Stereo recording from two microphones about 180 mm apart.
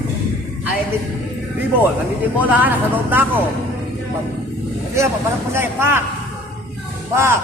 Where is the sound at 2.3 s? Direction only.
10° right (ahead or behind).